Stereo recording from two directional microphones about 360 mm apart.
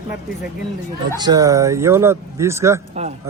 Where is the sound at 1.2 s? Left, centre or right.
Centre.